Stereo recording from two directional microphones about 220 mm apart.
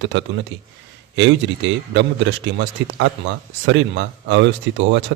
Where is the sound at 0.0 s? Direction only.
55° right (ahead or behind).